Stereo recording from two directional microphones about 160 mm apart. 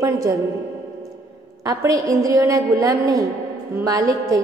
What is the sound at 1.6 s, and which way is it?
A woman's voice, 20° right (ahead or behind).